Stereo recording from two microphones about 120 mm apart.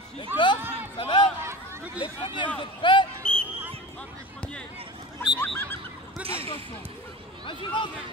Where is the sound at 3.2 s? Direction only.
10° left (ahead or behind).